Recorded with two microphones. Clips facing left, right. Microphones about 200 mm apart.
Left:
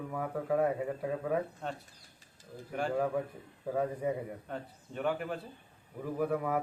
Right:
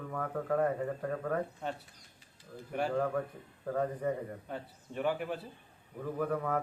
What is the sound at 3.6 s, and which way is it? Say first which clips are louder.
Speech: even; 10° left (ahead or behind).